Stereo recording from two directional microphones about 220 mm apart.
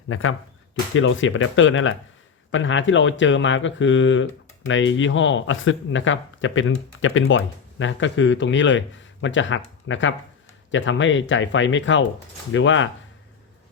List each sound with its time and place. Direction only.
0.1 s speech: 70° left (ahead or behind)